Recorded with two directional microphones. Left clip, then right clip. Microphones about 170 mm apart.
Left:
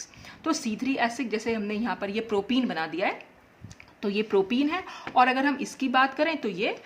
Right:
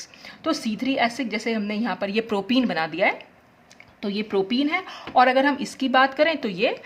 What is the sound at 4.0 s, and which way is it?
A woman's voice, centre (ahead or behind).